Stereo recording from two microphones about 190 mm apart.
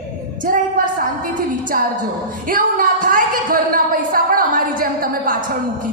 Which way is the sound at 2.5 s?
45° right (ahead or behind).